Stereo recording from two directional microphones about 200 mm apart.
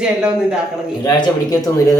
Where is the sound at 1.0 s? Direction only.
20° left (ahead or behind).